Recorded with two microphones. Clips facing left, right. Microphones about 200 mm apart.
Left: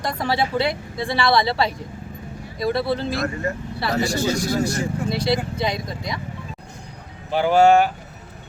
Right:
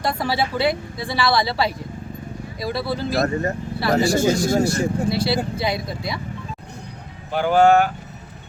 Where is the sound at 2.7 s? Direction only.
5° right (ahead or behind).